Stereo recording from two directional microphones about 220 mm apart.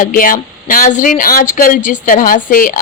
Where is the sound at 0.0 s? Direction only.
40° left (ahead or behind).